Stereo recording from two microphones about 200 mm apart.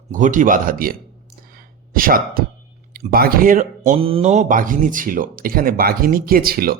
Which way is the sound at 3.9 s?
30° right (ahead or behind).